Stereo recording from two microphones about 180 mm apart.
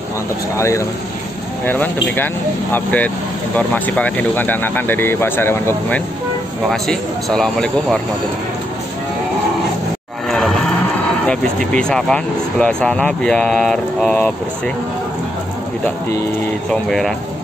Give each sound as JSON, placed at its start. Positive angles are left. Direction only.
{"t": 0.6, "sound": "speech", "side_deg": 15}
{"t": 10.2, "sound": "music", "side_deg": 0}
{"t": 11.2, "sound": "speech", "side_deg": 5}